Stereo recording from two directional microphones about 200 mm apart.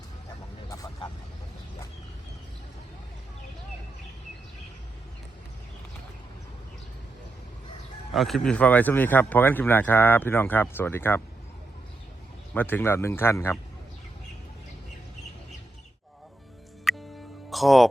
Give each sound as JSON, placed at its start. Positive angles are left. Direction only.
{"t": 0.7, "sound": "vehicle", "side_deg": 15}
{"t": 8.1, "sound": "speech", "side_deg": 0}
{"t": 12.5, "sound": "speech", "side_deg": 10}
{"t": 16.9, "sound": "music", "side_deg": 0}
{"t": 17.5, "sound": "speech", "side_deg": 0}